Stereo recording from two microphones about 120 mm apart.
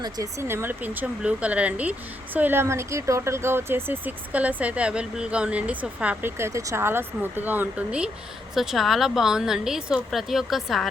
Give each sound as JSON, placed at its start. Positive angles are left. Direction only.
{"t": 0.0, "sound": "speech", "side_deg": -25}
{"t": 6.3, "sound": "a woman's voice", "side_deg": -25}